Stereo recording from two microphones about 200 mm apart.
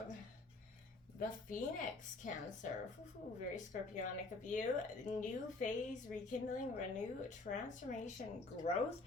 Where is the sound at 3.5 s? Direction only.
40° left (ahead or behind).